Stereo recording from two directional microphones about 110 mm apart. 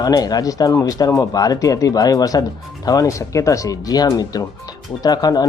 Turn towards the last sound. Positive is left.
turn(degrees=35)  # may be behind; listen again after turning